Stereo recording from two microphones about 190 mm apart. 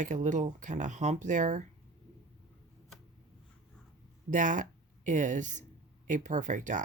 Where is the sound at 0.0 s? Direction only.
40° right (ahead or behind).